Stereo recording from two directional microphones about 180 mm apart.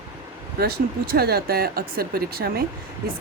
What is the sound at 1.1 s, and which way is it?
Speech, 60° right (ahead or behind).